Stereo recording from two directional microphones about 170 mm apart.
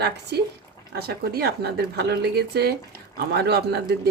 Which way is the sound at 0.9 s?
65° right (ahead or behind).